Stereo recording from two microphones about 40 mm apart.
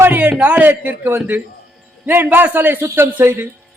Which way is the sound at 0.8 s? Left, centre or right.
Right.